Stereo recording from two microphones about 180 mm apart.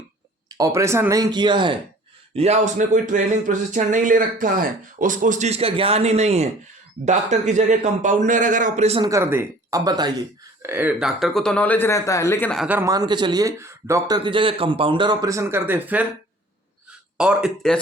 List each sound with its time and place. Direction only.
0.4 s a man's voice: 20° right (ahead or behind); by 9.0 s 35° right (ahead or behind)
9.0 s speech: 15° right (ahead or behind); by 12.5 s 10° left (ahead or behind)
12.5 s speech: 10° right (ahead or behind)
12.9 s a man's voice: 20° right (ahead or behind)
14.3 s a man's voice: 30° right (ahead or behind); by 16.0 s 10° right (ahead or behind)
17.2 s speech: 5° right (ahead or behind)